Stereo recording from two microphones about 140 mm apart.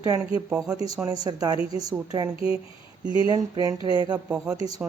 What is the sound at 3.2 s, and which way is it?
Speech, 30° right (ahead or behind).